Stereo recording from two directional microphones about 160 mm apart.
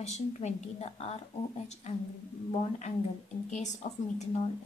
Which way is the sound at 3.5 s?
45° left (ahead or behind).